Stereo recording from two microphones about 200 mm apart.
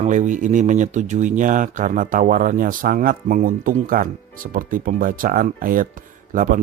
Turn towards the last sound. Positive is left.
turn(degrees=-40)  # may be behind; listen again after turning